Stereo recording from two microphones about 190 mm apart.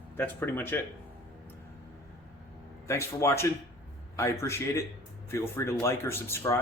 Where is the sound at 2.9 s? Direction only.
15° left (ahead or behind).